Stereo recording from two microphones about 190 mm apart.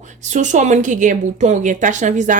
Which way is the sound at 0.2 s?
40° right (ahead or behind).